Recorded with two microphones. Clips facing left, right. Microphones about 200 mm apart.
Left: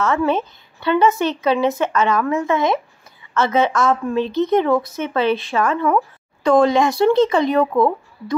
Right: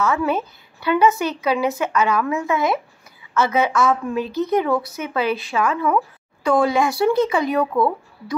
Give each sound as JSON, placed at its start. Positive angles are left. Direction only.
{"t": 0.0, "sound": "a woman's voice", "side_deg": -10}
{"t": 7.6, "sound": "speech", "side_deg": 20}